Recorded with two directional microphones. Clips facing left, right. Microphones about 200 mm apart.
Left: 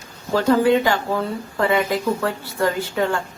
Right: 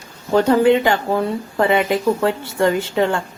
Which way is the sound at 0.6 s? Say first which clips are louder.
Right 3 dB; 20° right (ahead or behind).